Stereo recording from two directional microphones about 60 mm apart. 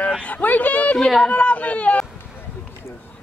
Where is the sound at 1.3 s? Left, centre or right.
Left.